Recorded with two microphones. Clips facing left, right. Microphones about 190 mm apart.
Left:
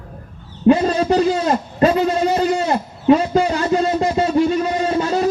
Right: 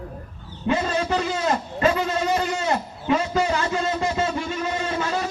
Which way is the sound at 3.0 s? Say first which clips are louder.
Left 8 dB; 35° left (ahead or behind).